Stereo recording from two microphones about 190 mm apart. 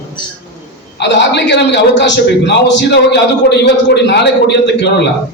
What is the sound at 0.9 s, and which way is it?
A man's voice, 65° left (ahead or behind).